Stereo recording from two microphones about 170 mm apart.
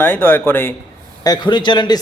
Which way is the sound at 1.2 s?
25° left (ahead or behind).